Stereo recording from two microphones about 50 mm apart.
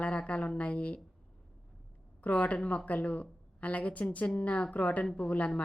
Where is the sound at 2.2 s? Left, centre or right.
Left.